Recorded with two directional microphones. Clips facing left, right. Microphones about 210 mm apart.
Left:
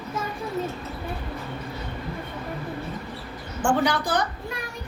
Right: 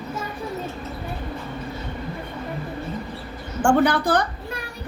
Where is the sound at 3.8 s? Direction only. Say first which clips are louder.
Right 5 dB; 55° right (ahead or behind).